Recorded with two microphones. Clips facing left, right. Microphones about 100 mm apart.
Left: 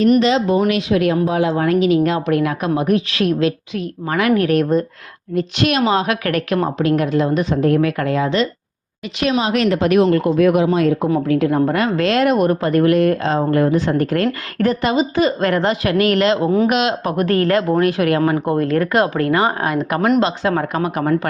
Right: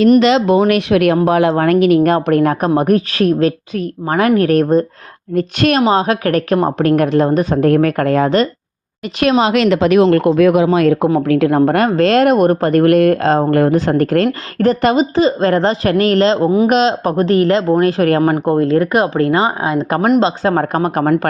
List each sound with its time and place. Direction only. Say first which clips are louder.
0.2 s a woman's voice: right 4 dB; 80° right
0.7 s a woman's voice: right 4 dB; 65° right (ahead or behind); by 6.6 s 35° right (ahead or behind)
6.7 s a woman's voice: right 4 dB; 55° right (ahead or behind)
9.2 s a woman's voice: right 5 dB; 70° right (ahead or behind)
13.7 s a woman's voice: right 4 dB; 45° right (ahead or behind)
15.1 s a woman's voice: right 4 dB; 30° right (ahead or behind)
17.2 s a woman's voice: right 3 dB; 20° right (ahead or behind)
20.0 s a woman's voice: right 3 dB; 35° right (ahead or behind)